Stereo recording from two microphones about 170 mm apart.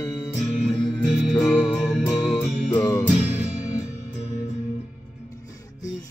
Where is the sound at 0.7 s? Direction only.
Centre (ahead or behind).